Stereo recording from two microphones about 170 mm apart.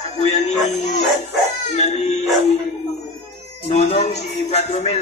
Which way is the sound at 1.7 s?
40° left (ahead or behind).